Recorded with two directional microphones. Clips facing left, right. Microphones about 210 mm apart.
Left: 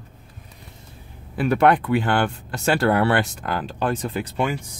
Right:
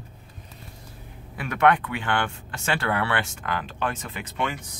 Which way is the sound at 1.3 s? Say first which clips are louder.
Left 4 dB; 35° left (ahead or behind).